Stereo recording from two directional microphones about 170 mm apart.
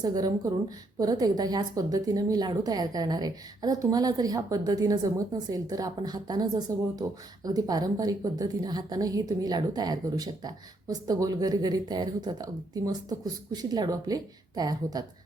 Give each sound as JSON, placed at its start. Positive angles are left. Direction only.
{"t": 0.0, "sound": "a woman's voice", "side_deg": -20}